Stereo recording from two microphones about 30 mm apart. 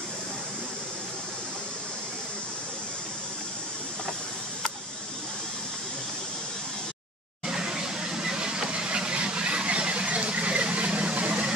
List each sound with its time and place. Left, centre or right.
7.4 s vehicle: right